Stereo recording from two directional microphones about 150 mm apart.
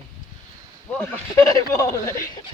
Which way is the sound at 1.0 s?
20° left (ahead or behind).